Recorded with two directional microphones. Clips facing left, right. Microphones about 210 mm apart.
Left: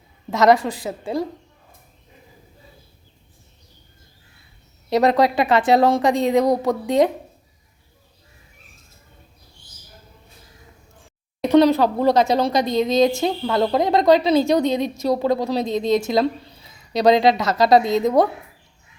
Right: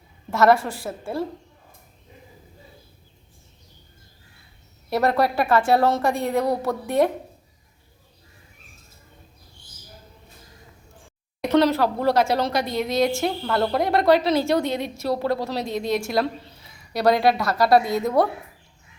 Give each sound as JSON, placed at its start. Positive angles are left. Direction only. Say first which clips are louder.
{"t": 0.3, "sound": "a woman's voice", "louder": "left 2 dB", "side_deg": 15}
{"t": 4.9, "sound": "a woman's voice", "louder": "left 4 dB", "side_deg": 20}
{"t": 11.5, "sound": "a woman's voice", "louder": "left 4 dB", "side_deg": 15}